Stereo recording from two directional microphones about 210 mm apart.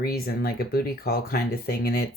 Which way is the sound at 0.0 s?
45° left (ahead or behind).